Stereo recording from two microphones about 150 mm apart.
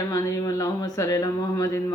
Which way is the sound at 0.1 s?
25° left (ahead or behind).